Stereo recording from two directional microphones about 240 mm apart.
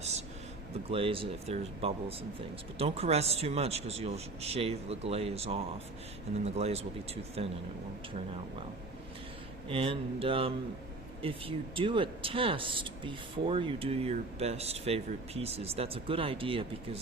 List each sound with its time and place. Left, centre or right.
0.9 s speech: right
9.6 s speech: right